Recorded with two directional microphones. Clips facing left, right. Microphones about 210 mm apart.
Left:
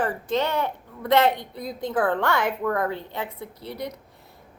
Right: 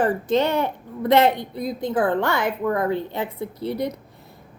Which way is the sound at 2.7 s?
20° right (ahead or behind).